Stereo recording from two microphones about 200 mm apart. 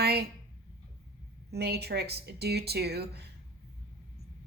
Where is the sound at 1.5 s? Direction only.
55° right (ahead or behind).